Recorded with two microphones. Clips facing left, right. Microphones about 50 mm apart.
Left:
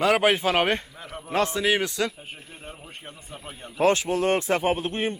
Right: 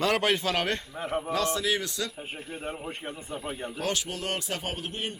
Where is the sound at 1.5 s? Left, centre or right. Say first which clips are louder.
Left 5 dB; left.